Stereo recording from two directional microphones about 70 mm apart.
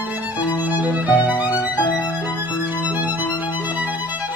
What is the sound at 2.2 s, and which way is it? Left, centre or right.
Music, right.